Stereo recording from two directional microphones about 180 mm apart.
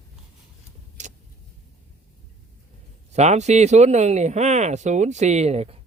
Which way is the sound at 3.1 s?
40° right (ahead or behind).